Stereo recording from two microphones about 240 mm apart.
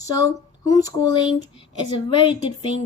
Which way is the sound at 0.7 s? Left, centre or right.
Centre.